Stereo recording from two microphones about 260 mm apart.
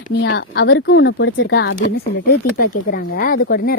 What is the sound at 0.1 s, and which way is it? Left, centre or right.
Speech, left.